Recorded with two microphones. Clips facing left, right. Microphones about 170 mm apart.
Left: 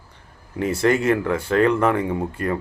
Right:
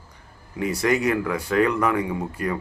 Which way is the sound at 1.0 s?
25° left (ahead or behind).